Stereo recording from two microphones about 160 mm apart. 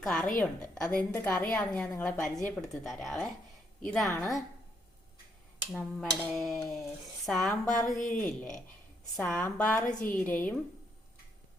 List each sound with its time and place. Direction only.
0.0 s a woman's voice: 5° left (ahead or behind)
2.6 s a sound: centre (ahead or behind)
3.8 s a woman's voice: 5° left (ahead or behind)
4.0 s a woman's voice: 20° left (ahead or behind)
5.7 s a sound: 5° left (ahead or behind)
8.2 s a woman's voice: 10° left (ahead or behind)